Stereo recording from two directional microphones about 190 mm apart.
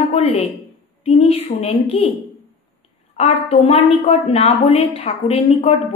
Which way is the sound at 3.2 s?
30° left (ahead or behind).